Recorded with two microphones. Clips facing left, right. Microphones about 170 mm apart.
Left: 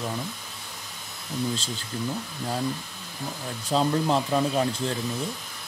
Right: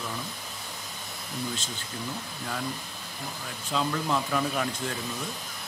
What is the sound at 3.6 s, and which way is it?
Speech, 35° left (ahead or behind).